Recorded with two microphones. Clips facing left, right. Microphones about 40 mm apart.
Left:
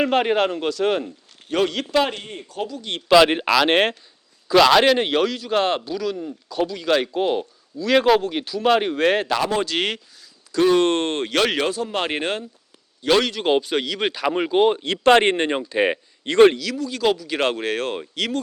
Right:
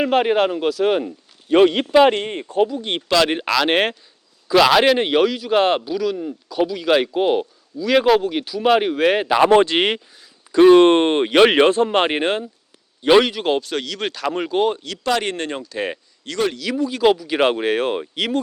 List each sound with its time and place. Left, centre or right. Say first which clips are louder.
0.0 s speech: right 2 dB; centre
1.5 s speech: right 8 dB; right
2.0 s speech: right 12 dB; right
2.6 s speech: right 9 dB; right
3.2 s speech: left 1 dB; centre
5.8 s speech: right 4 dB; centre
7.8 s speech: right 1 dB; centre
9.4 s speech: right 9 dB; right
9.7 s speech: right 5 dB; right
12.1 s speech: right 4 dB; right
13.4 s speech: left 1 dB; centre
14.8 s speech: left 6 dB; left
16.6 s speech: right 5 dB; centre